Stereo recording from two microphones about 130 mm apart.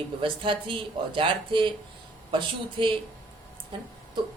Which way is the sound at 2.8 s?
40° right (ahead or behind).